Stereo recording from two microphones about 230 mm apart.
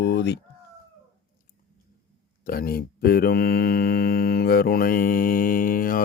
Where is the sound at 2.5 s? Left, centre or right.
Left.